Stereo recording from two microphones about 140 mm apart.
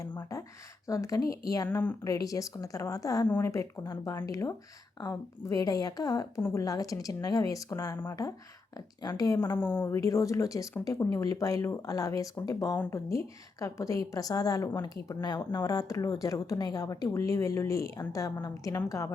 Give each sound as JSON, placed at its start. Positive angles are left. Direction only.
{"t": 0.2, "sound": "speech", "side_deg": 20}
{"t": 9.0, "sound": "speech", "side_deg": 25}
{"t": 9.6, "sound": "speech", "side_deg": 15}